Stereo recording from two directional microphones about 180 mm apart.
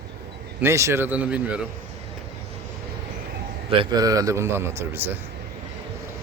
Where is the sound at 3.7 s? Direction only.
25° right (ahead or behind); by 5.2 s 10° right (ahead or behind).